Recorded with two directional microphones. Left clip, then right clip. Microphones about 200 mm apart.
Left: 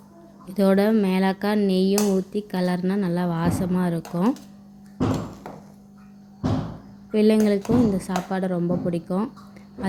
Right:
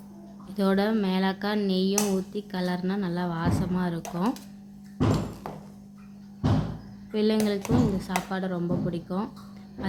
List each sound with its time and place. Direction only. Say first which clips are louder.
0.4 s speech: left 6 dB; 10° left (ahead or behind)
7.1 s speech: left 6 dB; 15° left (ahead or behind)